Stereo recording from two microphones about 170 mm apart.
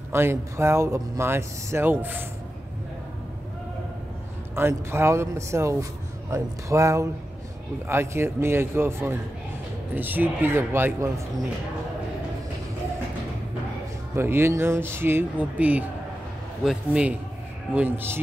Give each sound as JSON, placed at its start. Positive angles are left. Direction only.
{"t": 0.1, "sound": "speech", "side_deg": -15}
{"t": 4.6, "sound": "speech", "side_deg": -15}
{"t": 14.1, "sound": "speech", "side_deg": -15}